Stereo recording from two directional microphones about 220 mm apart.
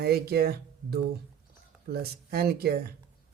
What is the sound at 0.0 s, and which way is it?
Speech, 45° right (ahead or behind).